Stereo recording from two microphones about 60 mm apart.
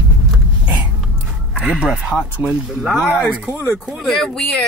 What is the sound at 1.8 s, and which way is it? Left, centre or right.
Speech, centre.